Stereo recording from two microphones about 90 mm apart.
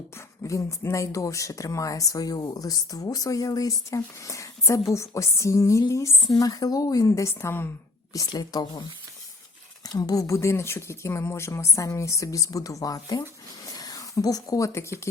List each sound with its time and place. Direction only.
0.4 s speech: 35° left (ahead or behind)
8.3 s a woman's voice: 45° left (ahead or behind)
9.8 s speech: 45° left (ahead or behind)
13.7 s a sound: 45° left (ahead or behind)